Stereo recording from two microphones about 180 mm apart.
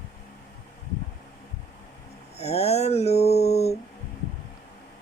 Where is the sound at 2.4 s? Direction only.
35° left (ahead or behind).